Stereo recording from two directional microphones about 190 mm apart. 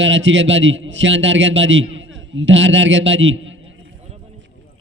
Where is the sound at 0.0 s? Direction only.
80° right.